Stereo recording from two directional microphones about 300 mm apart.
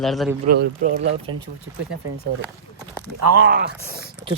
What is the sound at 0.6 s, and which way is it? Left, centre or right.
Speech, right.